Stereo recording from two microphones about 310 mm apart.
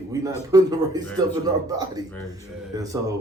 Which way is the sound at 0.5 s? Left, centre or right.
Centre.